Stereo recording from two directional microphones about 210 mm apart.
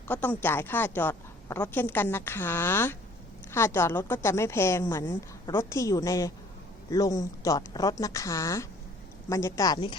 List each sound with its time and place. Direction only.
0.1 s a woman's voice: 10° left (ahead or behind)